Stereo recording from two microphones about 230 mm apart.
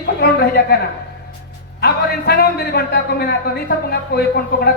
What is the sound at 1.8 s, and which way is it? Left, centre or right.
A man's voice, left.